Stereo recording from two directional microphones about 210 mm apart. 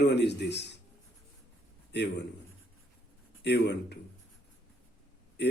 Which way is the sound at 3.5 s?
55° left (ahead or behind).